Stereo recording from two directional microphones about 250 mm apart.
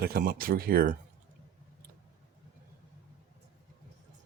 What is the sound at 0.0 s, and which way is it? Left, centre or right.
Speech, right.